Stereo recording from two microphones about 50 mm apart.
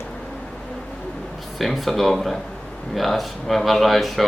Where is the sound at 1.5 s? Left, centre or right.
Centre.